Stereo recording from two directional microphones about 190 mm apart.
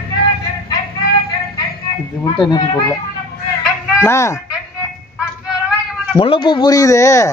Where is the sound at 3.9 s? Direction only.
15° left (ahead or behind).